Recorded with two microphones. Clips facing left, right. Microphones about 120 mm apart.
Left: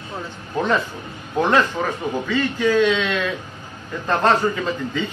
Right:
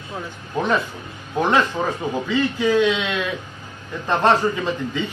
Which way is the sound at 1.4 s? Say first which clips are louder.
Left 1 dB; 20° right (ahead or behind).